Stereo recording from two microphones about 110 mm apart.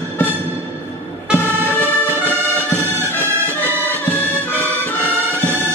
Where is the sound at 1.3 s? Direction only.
20° left (ahead or behind).